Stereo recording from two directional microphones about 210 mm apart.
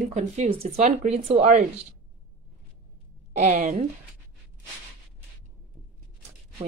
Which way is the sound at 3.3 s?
35° right (ahead or behind).